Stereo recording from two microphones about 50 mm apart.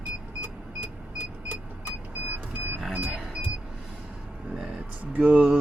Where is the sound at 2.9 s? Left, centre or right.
Right.